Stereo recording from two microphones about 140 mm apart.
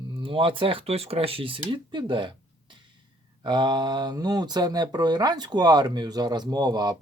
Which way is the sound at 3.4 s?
35° right (ahead or behind).